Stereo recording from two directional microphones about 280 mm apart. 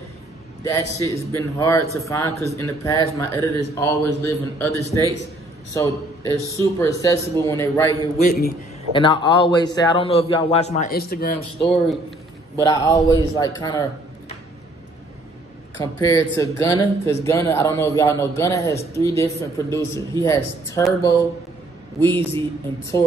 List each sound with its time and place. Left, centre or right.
0.7 s a man's voice: centre
8.2 s a man's voice: left
8.9 s a man's voice: centre; by 11.3 s left
11.3 s a man's voice: left
15.8 s speech: centre
22.0 s speech: centre